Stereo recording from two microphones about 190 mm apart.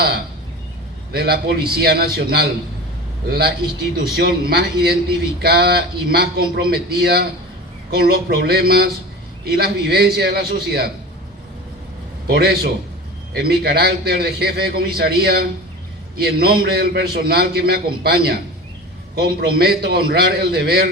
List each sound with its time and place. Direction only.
1.1 s a man's voice: 55° right (ahead or behind)
12.3 s a man's voice: 55° right (ahead or behind)